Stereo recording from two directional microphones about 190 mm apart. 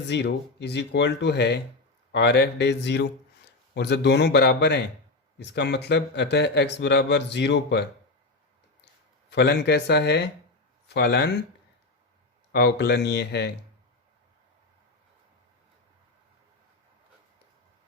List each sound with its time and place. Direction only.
0.1 s a man's voice: 65° left (ahead or behind)
9.3 s a man's voice: 65° left (ahead or behind)
12.5 s a man's voice: 60° left (ahead or behind)